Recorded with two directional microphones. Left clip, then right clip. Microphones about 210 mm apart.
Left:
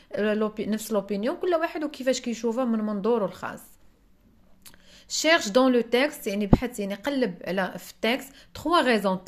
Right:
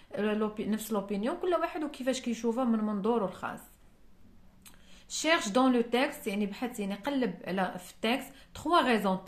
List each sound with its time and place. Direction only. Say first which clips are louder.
0.1 s speech: left 6 dB; 30° left (ahead or behind)
4.6 s speech: left 8 dB; 30° left (ahead or behind)